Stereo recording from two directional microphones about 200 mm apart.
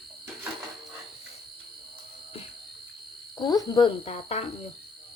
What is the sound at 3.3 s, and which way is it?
Speech, 20° left (ahead or behind).